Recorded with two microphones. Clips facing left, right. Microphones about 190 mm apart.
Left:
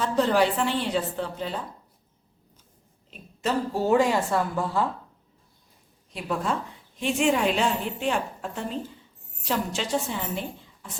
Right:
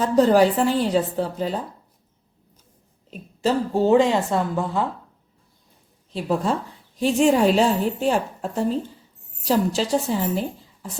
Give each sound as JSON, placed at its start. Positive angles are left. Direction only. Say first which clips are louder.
{"t": 0.0, "sound": "a woman's voice", "louder": "right 6 dB", "side_deg": -40}
{"t": 3.1, "sound": "a woman's voice", "louder": "right 5 dB", "side_deg": -30}
{"t": 6.1, "sound": "a woman's voice", "louder": "right 5 dB", "side_deg": -30}